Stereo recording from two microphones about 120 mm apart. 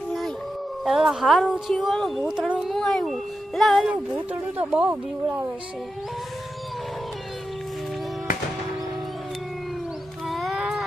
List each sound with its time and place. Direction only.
0.9 s speech: 5° right (ahead or behind)
2.2 s speech: 10° right (ahead or behind)
4.1 s speech: 15° right (ahead or behind)
10.2 s music: centre (ahead or behind)